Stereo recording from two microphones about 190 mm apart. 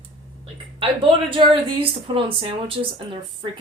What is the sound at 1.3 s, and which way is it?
Speech, 25° right (ahead or behind).